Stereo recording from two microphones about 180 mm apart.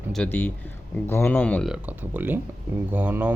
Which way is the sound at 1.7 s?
10° right (ahead or behind).